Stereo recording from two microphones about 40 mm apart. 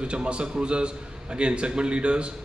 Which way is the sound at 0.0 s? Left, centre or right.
Right.